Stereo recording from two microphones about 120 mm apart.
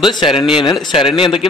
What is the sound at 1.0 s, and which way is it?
Speech, 45° left (ahead or behind).